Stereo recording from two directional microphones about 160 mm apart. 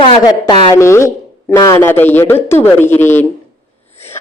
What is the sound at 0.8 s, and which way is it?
A man's voice, 15° left (ahead or behind).